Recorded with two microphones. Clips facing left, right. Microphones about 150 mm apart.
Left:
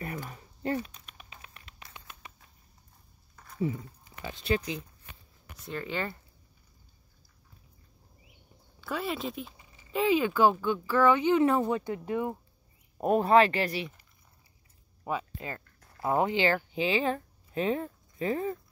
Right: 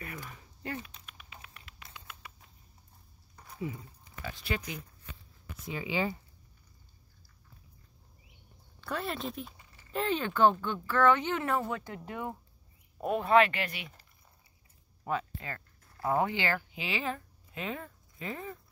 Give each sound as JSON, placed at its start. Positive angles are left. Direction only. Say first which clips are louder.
{"t": 0.2, "sound": "a sound", "louder": "left 7 dB", "side_deg": 35}
{"t": 1.0, "sound": "patter", "louder": "left 1 dB", "side_deg": 30}
{"t": 4.1, "sound": "speech", "louder": "left 6 dB", "side_deg": 20}
{"t": 5.7, "sound": "speech", "louder": "right 1 dB", "side_deg": -10}
{"t": 8.8, "sound": "speech", "louder": "left 2 dB", "side_deg": 0}
{"t": 13.0, "sound": "speech", "louder": "left 3 dB", "side_deg": 40}
{"t": 15.3, "sound": "speech", "louder": "left 3 dB", "side_deg": 20}